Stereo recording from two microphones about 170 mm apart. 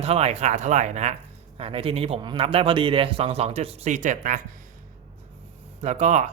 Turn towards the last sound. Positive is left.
turn(degrees=-40)  # may be behind; listen again after turning